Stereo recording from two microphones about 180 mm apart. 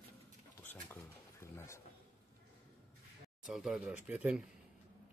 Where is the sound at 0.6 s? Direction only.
10° left (ahead or behind).